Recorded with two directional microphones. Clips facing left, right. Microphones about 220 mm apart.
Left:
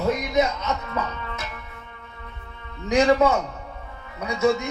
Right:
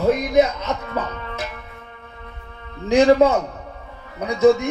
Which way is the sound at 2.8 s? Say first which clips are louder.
Right 4 dB; 30° right (ahead or behind).